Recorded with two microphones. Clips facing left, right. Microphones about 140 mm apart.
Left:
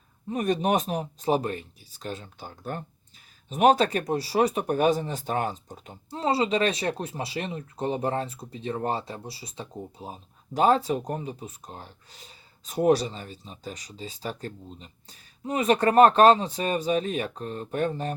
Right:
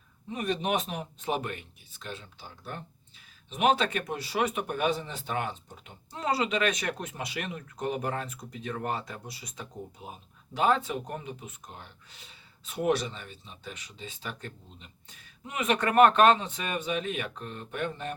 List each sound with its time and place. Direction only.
0.3 s speech: 45° left (ahead or behind)